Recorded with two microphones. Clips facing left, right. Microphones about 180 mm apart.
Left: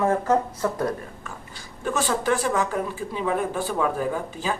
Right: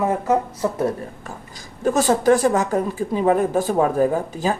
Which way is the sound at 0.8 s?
30° right (ahead or behind).